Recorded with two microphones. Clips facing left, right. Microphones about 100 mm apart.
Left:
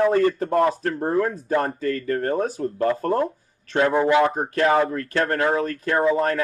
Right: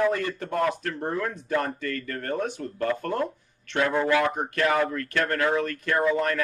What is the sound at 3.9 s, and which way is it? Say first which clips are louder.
Speech: left 5 dB; 20° left (ahead or behind).